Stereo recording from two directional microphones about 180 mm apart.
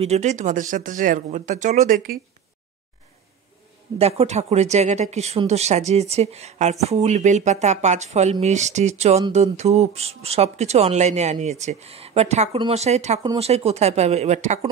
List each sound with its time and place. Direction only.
0.0 s speech: 40° right (ahead or behind)
4.0 s speech: 35° right (ahead or behind)